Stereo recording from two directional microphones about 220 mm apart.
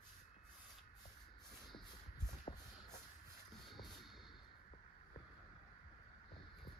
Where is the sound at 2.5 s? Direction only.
25° left (ahead or behind).